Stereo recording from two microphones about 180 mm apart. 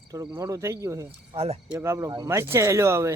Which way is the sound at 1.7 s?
15° right (ahead or behind).